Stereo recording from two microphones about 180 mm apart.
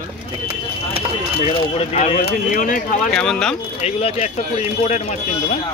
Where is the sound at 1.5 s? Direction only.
35° left (ahead or behind).